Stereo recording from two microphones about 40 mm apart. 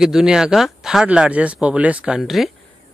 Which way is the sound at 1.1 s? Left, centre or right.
Right.